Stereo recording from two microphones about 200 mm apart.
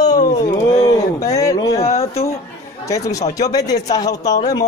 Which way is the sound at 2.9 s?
15° left (ahead or behind).